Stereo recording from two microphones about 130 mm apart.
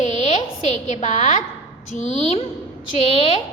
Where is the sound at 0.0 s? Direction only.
60° left (ahead or behind).